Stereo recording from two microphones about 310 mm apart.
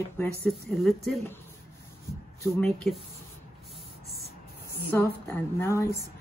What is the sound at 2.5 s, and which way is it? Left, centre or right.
Speech, centre.